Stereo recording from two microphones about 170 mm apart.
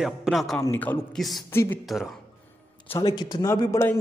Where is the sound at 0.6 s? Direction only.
15° left (ahead or behind).